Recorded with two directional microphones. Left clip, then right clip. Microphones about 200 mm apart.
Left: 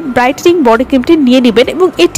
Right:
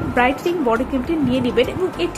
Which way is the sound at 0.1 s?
50° left (ahead or behind).